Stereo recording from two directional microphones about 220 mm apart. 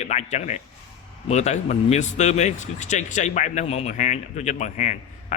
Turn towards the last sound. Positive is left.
turn(degrees=35)  # may be behind; listen again after turning